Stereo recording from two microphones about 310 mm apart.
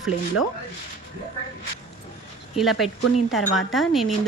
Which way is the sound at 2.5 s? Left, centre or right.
Centre.